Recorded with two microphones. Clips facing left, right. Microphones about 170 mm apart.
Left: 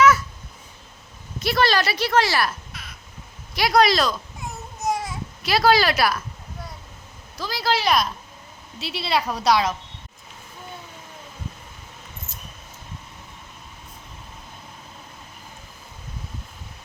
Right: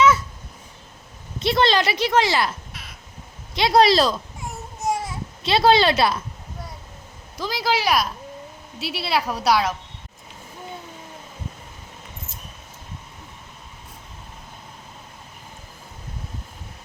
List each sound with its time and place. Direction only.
1.4 s a woman's voice: 25° right (ahead or behind)
4.8 s baby cry: 5° right (ahead or behind)
5.4 s a woman's voice: 25° right (ahead or behind)
7.3 s a woman's voice: 15° right (ahead or behind)